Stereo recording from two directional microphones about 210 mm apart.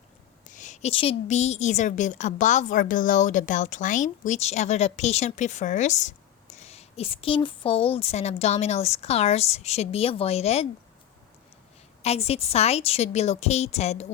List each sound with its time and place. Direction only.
0.4 s a woman's voice: 35° left (ahead or behind)
12.0 s a woman's voice: 30° left (ahead or behind)